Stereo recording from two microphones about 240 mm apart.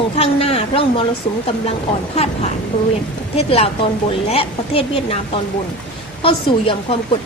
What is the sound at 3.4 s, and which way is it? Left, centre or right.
A woman's voice, left.